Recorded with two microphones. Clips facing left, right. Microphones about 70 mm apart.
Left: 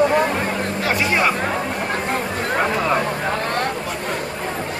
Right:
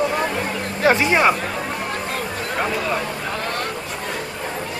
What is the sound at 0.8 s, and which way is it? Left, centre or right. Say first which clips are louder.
Speech: right 4 dB; right.